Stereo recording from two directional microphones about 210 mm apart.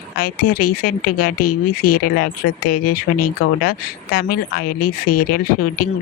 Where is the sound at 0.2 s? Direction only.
45° left (ahead or behind).